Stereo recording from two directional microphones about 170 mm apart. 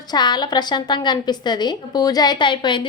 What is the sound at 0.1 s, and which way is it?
A woman's voice, 25° left (ahead or behind).